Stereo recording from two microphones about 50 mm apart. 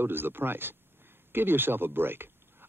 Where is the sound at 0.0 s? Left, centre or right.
Right.